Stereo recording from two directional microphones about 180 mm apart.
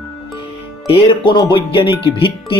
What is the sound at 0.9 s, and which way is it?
Speech, 25° left (ahead or behind).